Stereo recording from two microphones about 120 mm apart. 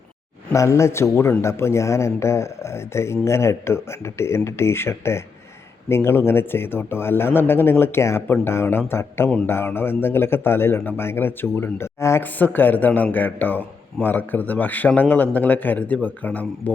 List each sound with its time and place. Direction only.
0.5 s a man's voice: 25° left (ahead or behind)